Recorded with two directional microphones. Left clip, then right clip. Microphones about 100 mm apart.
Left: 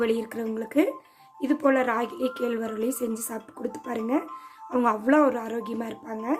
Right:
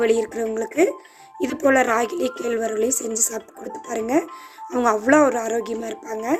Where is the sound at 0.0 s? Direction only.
45° right (ahead or behind).